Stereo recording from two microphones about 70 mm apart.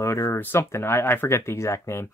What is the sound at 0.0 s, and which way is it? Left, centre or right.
Speech, left.